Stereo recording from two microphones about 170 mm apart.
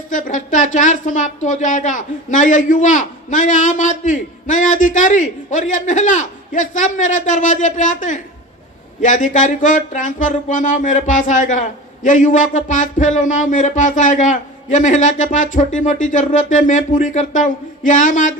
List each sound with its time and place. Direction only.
0.1 s speech: 50° left (ahead or behind)